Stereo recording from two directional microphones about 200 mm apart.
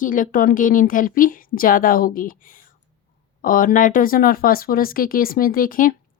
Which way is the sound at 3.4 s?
45° left (ahead or behind).